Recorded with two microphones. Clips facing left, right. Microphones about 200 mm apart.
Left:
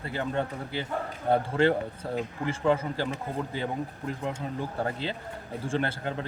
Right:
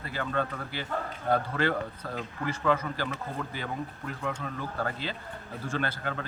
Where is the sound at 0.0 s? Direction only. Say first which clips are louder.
Left 1 dB; 25° left (ahead or behind).